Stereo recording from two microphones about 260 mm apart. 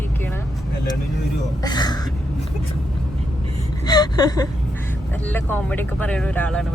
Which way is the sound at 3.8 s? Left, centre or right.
Centre.